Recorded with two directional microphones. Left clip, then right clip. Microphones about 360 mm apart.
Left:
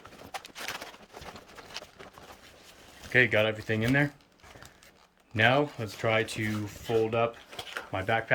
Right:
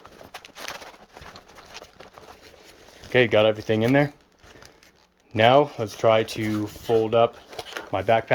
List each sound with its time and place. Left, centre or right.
3.1 s speech: centre
5.3 s speech: centre
7.7 s a sound: centre